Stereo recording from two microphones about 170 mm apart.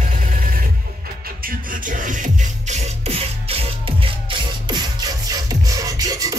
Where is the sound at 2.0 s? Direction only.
50° right (ahead or behind).